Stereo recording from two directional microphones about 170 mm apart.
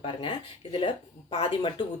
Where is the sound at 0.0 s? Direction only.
30° left (ahead or behind).